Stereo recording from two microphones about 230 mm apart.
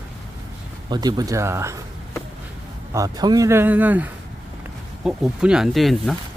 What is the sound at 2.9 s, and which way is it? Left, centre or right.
Speech, centre.